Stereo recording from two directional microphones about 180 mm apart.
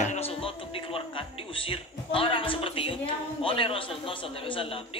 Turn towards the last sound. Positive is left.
turn(degrees=30)  # may be behind; listen again after turning